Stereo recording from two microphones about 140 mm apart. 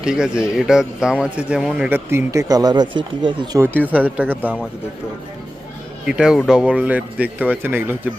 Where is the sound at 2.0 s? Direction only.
20° right (ahead or behind).